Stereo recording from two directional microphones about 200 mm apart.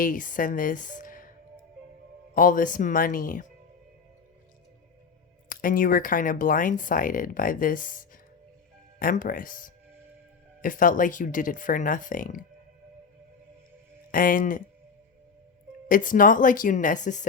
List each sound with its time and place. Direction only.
0.0 s speech: 45° left (ahead or behind)
2.3 s speech: 40° left (ahead or behind)
5.6 s speech: 45° left (ahead or behind)
14.1 s speech: 45° left (ahead or behind)
15.9 s speech: 45° left (ahead or behind)